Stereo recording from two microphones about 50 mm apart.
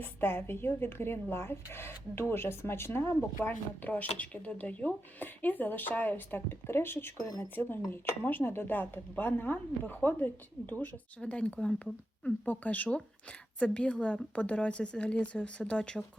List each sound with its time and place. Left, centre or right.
0.0 s speech: left
3.4 s speech: left
11.2 s speech: left
13.6 s speech: centre